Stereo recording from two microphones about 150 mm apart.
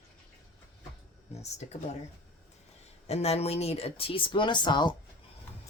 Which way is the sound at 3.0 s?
45° left (ahead or behind).